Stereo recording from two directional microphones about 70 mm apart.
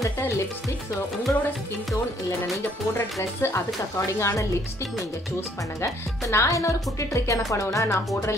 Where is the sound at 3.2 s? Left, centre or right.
Left.